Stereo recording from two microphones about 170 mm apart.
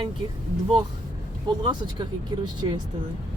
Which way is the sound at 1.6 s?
25° right (ahead or behind).